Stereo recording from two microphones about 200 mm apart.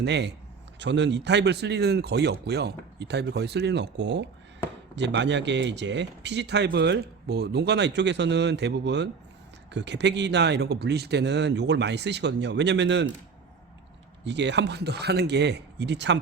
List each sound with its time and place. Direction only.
0.0 s speech: 55° right (ahead or behind)
14.3 s speech: 60° right (ahead or behind)